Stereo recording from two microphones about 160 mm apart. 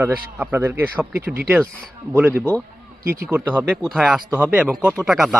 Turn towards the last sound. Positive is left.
turn(degrees=-5)  # may be behind; listen again after turning